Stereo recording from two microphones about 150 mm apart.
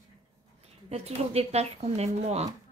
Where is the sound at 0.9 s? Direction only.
45° right (ahead or behind).